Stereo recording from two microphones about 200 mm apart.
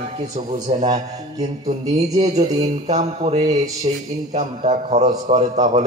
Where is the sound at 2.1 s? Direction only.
35° right (ahead or behind).